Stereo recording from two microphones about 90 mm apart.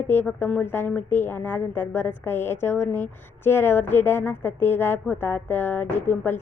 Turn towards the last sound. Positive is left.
turn(degrees=25)  # may be behind; listen again after turning